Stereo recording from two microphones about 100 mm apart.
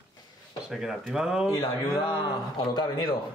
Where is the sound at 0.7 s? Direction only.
5° right (ahead or behind).